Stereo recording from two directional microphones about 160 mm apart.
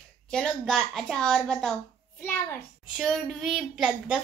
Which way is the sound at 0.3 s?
Centre (ahead or behind).